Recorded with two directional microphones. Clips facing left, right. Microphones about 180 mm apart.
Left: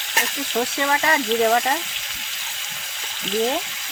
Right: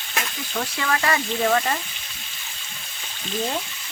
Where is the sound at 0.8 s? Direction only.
20° left (ahead or behind).